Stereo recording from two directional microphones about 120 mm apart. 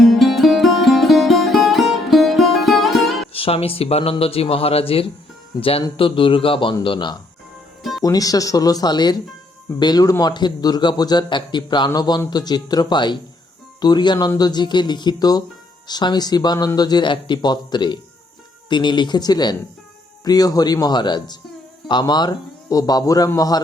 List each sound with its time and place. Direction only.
0.0 s music: centre (ahead or behind)
3.3 s a man's voice: 55° left (ahead or behind)
8.0 s a man's voice: 30° left (ahead or behind)